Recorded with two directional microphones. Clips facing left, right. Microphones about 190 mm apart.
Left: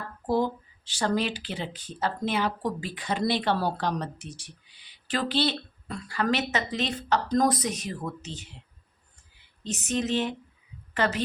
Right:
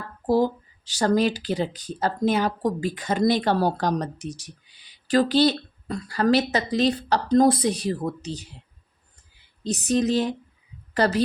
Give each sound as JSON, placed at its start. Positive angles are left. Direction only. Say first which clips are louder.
{"t": 0.3, "sound": "speech", "louder": "right 5 dB", "side_deg": -35}
{"t": 9.6, "sound": "a woman's voice", "louder": "right 6 dB", "side_deg": -35}